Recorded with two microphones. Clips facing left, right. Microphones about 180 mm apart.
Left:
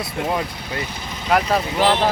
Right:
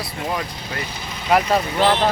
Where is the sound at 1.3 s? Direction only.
Centre (ahead or behind).